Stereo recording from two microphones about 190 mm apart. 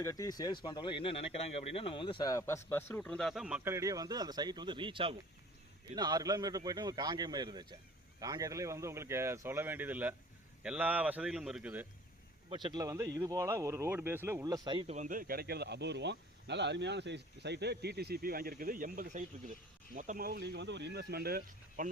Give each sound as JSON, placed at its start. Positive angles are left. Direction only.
{"t": 0.0, "sound": "a man's voice", "side_deg": 20}
{"t": 12.5, "sound": "speech", "side_deg": -25}
{"t": 14.9, "sound": "speech", "side_deg": -45}